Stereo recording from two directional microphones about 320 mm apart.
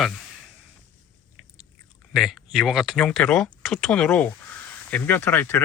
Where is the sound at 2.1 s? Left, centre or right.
Centre.